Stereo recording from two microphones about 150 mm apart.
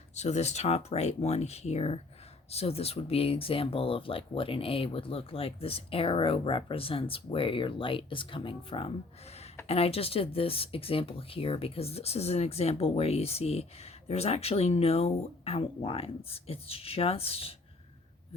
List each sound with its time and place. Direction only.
0.1 s speech: 50° left (ahead or behind)